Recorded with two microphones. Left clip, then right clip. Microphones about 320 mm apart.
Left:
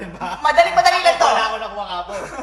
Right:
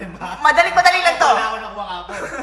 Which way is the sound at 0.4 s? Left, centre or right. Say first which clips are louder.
Right 1 dB; centre.